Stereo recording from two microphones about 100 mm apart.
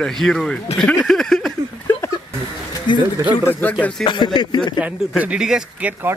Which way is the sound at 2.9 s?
50° left (ahead or behind).